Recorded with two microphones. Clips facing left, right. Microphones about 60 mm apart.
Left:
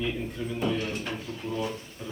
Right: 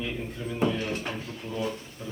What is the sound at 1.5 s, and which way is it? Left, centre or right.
Speech, left.